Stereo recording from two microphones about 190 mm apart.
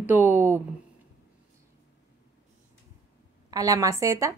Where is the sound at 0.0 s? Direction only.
10° right (ahead or behind).